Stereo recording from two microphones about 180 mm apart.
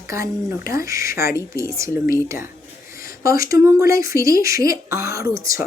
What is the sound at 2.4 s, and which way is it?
Whispering, 15° right (ahead or behind).